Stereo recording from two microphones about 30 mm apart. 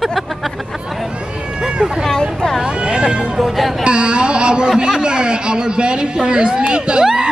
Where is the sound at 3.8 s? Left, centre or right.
Right.